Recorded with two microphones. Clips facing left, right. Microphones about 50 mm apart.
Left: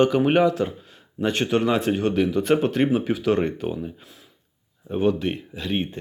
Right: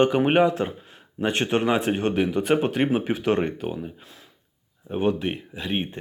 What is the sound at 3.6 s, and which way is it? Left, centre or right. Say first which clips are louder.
Speech: left 2 dB; centre.